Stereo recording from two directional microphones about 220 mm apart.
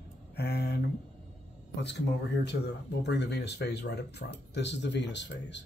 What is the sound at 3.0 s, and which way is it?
Speech, 50° left (ahead or behind).